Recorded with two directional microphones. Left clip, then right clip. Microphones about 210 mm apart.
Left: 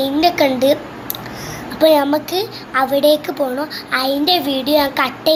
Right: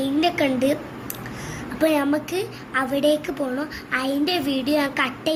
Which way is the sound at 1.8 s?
20° right (ahead or behind).